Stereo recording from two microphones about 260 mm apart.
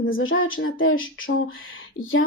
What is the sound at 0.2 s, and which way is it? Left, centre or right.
A woman's voice, left.